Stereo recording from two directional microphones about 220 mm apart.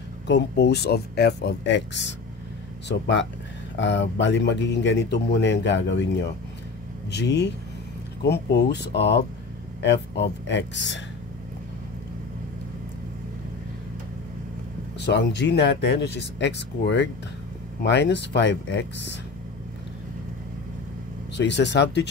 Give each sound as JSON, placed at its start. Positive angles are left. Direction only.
{"t": 0.3, "sound": "speech", "side_deg": 50}
{"t": 15.0, "sound": "speech", "side_deg": 50}
{"t": 21.4, "sound": "speech", "side_deg": 50}